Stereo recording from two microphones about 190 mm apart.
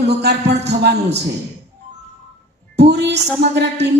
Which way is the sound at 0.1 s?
60° right (ahead or behind).